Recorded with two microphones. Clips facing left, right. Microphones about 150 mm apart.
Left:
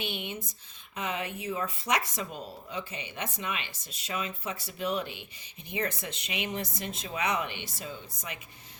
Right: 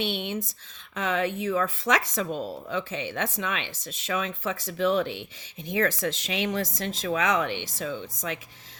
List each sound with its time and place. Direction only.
0.0 s speech: 90° right